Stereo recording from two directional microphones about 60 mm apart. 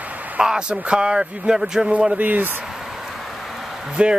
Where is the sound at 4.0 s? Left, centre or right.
Centre.